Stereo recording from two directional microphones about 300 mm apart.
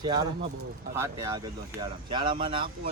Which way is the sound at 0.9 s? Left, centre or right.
Centre.